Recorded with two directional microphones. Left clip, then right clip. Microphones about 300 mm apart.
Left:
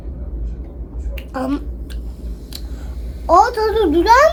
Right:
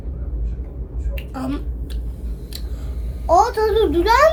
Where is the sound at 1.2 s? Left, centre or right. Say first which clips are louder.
Left 5 dB; left.